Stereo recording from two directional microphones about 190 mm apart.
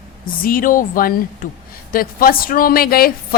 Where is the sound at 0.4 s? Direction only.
45° left (ahead or behind).